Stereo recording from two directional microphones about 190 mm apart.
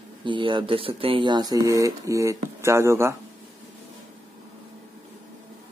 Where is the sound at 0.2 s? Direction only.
25° right (ahead or behind).